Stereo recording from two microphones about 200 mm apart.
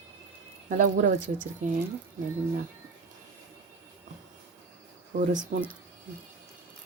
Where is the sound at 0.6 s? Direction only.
40° right (ahead or behind).